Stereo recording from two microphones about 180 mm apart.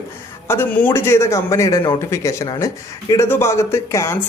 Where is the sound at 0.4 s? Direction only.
15° left (ahead or behind).